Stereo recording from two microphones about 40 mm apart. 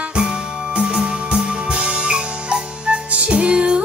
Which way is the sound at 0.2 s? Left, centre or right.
Centre.